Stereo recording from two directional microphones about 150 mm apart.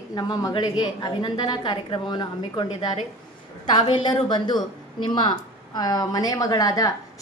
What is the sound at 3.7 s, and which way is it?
A woman's voice, 35° left (ahead or behind).